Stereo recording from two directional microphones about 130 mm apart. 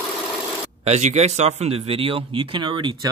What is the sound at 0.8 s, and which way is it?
Speech, 60° right (ahead or behind).